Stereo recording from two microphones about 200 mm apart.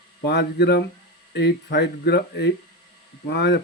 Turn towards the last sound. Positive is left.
turn(degrees=55)  # may be behind; listen again after turning